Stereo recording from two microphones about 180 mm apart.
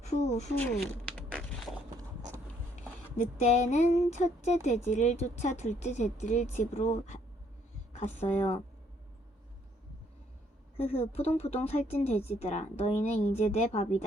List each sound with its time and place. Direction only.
0.0 s speech: 40° left (ahead or behind)
3.2 s speech: 40° left (ahead or behind)
10.8 s speech: 35° left (ahead or behind)